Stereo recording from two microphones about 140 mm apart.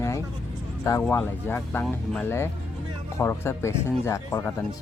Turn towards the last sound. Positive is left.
turn(degrees=20)  # may be behind; listen again after turning